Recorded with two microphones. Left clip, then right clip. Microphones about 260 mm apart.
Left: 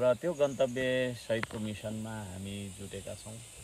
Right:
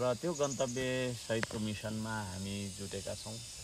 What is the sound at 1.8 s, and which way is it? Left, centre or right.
Speech, centre.